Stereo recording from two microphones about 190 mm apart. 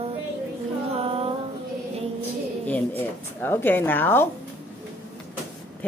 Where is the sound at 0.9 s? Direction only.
30° right (ahead or behind).